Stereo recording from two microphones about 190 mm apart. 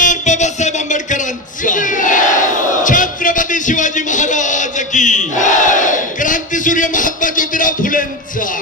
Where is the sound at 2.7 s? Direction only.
45° left (ahead or behind).